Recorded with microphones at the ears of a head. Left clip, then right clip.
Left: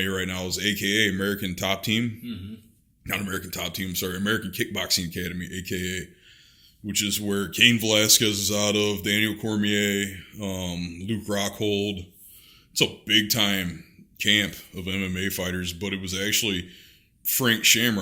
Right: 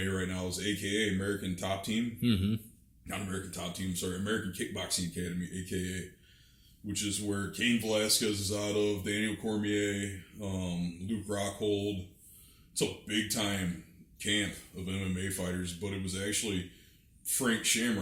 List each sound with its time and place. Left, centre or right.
0.0 s speech: left
2.2 s a man's voice: right
3.1 s speech: left